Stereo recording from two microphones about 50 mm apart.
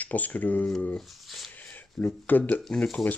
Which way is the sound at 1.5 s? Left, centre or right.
Left.